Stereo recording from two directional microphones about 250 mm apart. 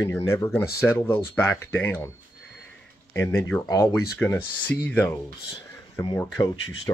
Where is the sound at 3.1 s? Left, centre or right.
Centre.